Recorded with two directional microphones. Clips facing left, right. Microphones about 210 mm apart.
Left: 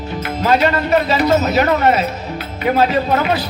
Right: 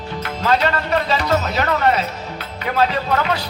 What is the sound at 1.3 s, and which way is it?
Speech, 20° left (ahead or behind).